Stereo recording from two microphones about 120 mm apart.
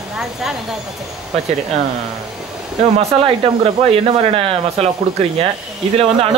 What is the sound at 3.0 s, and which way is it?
Speech, 60° right (ahead or behind).